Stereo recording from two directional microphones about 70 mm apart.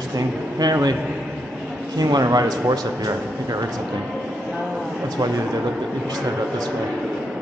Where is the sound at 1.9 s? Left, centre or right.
Right.